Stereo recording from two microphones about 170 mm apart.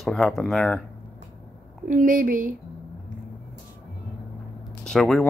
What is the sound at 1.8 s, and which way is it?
Speech, 50° right (ahead or behind).